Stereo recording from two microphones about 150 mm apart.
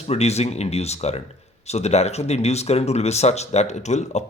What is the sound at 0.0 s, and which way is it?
Speech, 45° left (ahead or behind).